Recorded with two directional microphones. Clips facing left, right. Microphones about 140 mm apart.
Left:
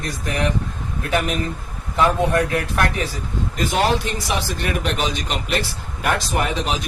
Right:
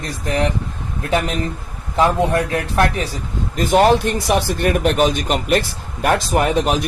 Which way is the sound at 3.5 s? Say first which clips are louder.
Right 7 dB; 50° right (ahead or behind).